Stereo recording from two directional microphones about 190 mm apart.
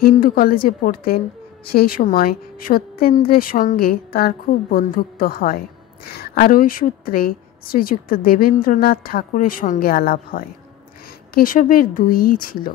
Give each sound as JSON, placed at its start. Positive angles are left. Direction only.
{"t": 0.0, "sound": "a woman's voice", "side_deg": 50}